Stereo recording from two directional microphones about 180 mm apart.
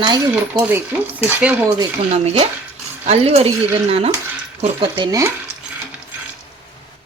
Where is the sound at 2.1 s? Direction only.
35° right (ahead or behind).